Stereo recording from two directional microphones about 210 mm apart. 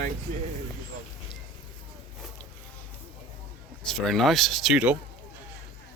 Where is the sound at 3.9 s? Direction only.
Centre (ahead or behind).